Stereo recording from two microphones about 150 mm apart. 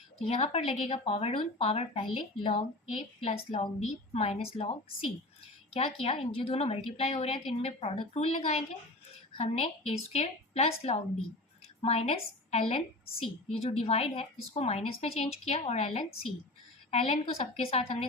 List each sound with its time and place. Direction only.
0.3 s a woman's voice: 40° left (ahead or behind)